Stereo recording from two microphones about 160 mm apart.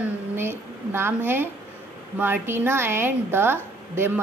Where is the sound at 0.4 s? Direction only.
15° right (ahead or behind).